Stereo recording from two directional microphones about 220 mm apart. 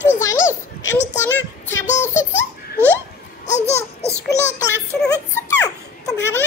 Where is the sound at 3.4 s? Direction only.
30° left (ahead or behind).